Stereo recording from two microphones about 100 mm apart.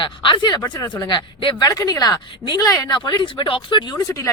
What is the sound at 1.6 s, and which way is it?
Speech, 35° left (ahead or behind).